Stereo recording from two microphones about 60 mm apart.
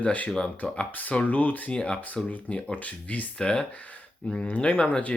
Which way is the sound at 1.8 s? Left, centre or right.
Centre.